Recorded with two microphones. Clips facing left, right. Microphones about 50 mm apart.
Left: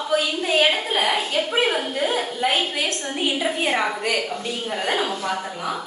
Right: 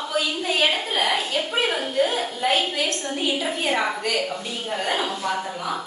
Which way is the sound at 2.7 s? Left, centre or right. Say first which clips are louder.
Even; left.